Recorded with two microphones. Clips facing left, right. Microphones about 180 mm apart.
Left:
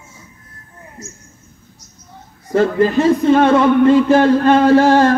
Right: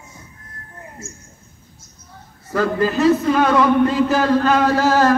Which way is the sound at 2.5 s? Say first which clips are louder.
Left 5 dB; 30° left (ahead or behind).